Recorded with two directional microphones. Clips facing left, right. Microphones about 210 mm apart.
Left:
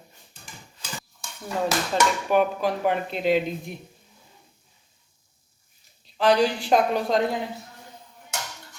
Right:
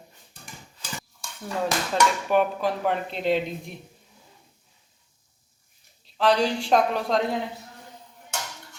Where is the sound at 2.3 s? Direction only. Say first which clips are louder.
Left 3 dB; centre (ahead or behind).